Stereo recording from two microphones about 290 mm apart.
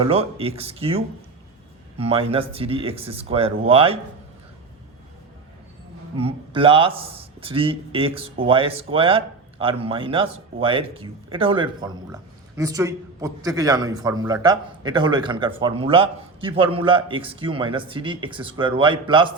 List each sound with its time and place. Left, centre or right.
0.0 s a man's voice: centre
6.1 s a man's voice: centre